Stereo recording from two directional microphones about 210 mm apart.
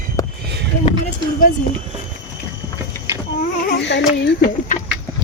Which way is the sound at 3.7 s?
55° left (ahead or behind).